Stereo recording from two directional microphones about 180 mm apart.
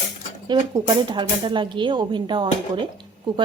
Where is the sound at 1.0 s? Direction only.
25° right (ahead or behind).